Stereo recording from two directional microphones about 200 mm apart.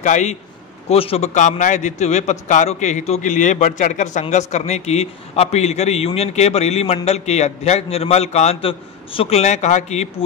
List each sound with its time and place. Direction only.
0.0 s a man's voice: 35° left (ahead or behind)